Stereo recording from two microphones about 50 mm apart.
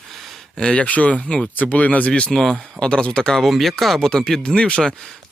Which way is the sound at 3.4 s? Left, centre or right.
Centre.